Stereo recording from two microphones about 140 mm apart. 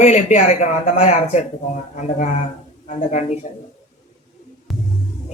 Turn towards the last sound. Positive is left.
turn(degrees=0)  # may be behind; listen again after turning